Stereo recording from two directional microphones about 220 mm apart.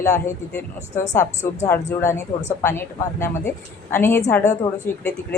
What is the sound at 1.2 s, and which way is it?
Speech, 35° left (ahead or behind).